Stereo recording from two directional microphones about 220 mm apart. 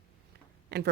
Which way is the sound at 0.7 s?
50° right (ahead or behind).